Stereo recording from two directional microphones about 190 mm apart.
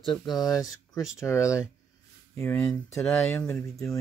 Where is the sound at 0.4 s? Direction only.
20° left (ahead or behind); by 4.0 s centre (ahead or behind).